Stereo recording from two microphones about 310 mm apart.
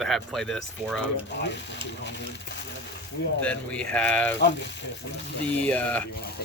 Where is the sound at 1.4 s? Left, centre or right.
Left.